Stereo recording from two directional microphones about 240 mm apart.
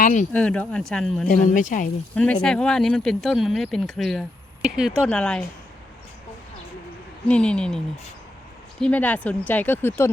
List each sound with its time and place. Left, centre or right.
0.0 s speech: left
0.3 s speech: centre
1.3 s speech: left
2.1 s speech: centre
7.3 s speech: centre
8.8 s speech: centre